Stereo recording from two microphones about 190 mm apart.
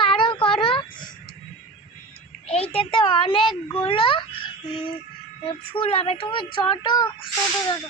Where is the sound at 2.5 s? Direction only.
30° left (ahead or behind).